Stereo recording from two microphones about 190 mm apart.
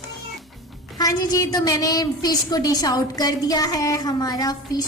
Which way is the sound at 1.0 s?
20° left (ahead or behind).